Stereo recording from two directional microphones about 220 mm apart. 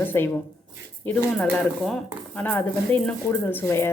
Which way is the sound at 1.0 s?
5° left (ahead or behind).